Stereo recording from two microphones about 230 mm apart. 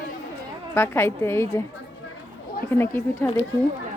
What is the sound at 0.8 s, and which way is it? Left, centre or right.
Speech, centre.